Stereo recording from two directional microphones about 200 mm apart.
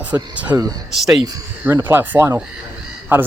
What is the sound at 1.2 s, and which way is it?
Speech, 15° right (ahead or behind).